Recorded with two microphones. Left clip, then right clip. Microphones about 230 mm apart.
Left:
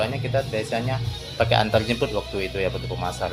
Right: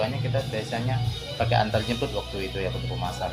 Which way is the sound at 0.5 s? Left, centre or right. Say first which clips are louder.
Left 4 dB; left.